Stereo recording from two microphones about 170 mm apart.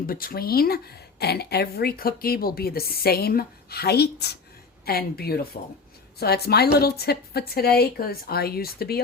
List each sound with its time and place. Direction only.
0.1 s a woman's voice: 60° left (ahead or behind)